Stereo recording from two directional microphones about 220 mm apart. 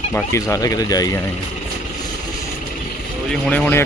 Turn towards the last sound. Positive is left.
turn(degrees=5)  # may be behind; listen again after turning